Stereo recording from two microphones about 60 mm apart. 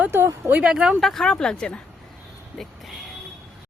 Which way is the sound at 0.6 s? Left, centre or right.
Centre.